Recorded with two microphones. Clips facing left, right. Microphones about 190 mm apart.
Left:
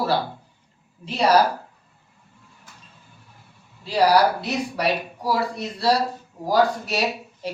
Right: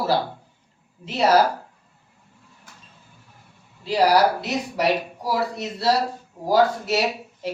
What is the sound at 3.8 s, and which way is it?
Speech, 20° right (ahead or behind).